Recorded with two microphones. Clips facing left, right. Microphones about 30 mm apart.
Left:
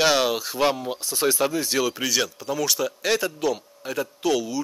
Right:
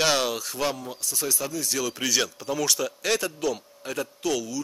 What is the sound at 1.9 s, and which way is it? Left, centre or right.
Speech, centre.